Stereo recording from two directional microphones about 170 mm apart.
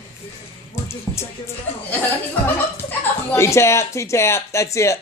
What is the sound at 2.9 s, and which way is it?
A man's voice, 15° left (ahead or behind).